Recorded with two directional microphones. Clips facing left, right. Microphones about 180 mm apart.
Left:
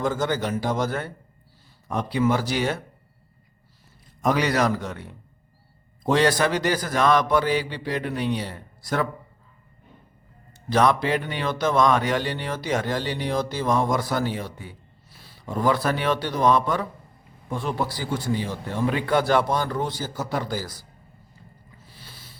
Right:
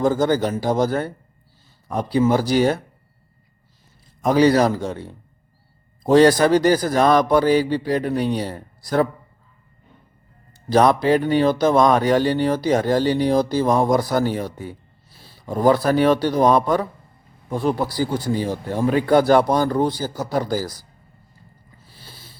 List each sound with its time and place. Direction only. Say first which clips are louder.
0.0 s speech: right 6 dB; 35° right (ahead or behind)
4.4 s speech: right 11 dB; 35° right (ahead or behind)
10.7 s speech: right 5 dB; 35° right (ahead or behind)
21.9 s a sound: right 3 dB; 30° right (ahead or behind)